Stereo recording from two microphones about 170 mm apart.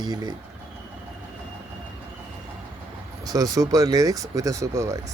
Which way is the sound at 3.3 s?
20° right (ahead or behind).